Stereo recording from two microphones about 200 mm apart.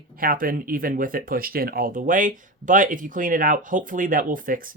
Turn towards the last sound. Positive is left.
turn(degrees=-45)  # may be behind; listen again after turning